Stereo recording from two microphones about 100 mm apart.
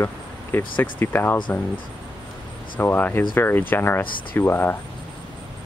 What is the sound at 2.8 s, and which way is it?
Speech, 20° left (ahead or behind).